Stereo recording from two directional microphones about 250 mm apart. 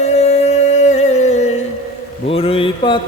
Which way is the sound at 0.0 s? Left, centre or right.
Left.